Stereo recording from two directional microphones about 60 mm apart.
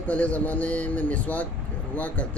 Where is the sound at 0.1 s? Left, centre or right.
Left.